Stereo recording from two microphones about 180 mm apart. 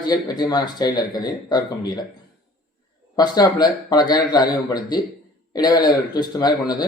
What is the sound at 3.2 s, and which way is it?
A man's voice, 20° left (ahead or behind).